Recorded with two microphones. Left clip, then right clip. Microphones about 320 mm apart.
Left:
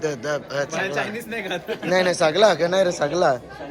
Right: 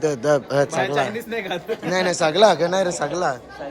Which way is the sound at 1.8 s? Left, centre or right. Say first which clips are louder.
Left 2 dB; centre.